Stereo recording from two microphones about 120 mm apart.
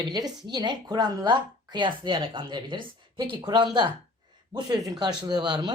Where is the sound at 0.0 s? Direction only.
35° right (ahead or behind).